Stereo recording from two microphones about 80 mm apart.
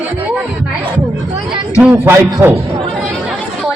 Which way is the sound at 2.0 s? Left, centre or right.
Right.